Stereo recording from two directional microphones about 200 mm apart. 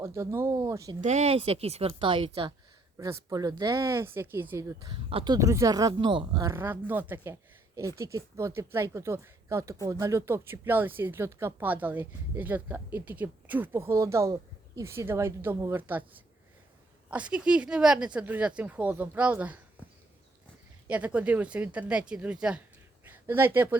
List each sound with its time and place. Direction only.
0.0 s speech: 15° right (ahead or behind)
1.0 s a woman's voice: 35° right (ahead or behind); by 16.0 s 10° right (ahead or behind)
17.1 s speech: 5° right (ahead or behind)
20.8 s speech: 5° right (ahead or behind)
23.0 s a sound: 10° right (ahead or behind)